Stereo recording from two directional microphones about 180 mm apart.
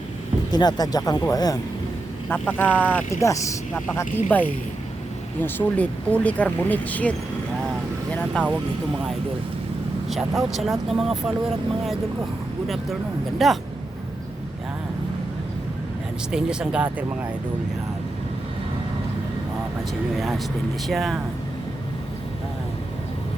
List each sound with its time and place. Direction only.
0.5 s speech: 20° left (ahead or behind)
8.1 s speech: 5° left (ahead or behind)
10.1 s speech: centre (ahead or behind)
12.6 s speech: centre (ahead or behind)
16.3 s speech: 5° right (ahead or behind)
20.8 s speech: centre (ahead or behind)